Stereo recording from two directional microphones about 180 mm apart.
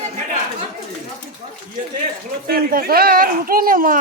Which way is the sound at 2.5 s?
55° right (ahead or behind).